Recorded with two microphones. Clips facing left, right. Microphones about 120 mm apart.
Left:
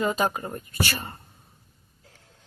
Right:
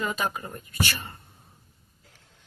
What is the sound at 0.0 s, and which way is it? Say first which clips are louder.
Speech: left 4 dB; 35° left (ahead or behind).